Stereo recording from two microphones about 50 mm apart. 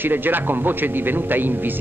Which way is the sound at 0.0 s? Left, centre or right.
Right.